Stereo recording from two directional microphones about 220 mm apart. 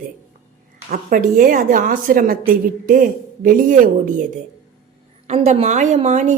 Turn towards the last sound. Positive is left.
turn(degrees=-30)  # may be behind; listen again after turning